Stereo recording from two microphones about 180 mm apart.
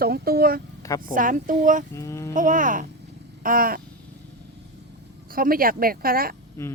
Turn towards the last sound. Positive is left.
turn(degrees=-55)  # may be behind; listen again after turning